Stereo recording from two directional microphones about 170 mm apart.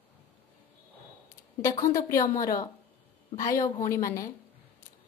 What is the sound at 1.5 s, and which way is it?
A woman's voice, 20° left (ahead or behind).